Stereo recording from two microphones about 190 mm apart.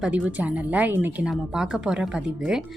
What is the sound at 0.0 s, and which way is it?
A woman's voice, 5° right (ahead or behind).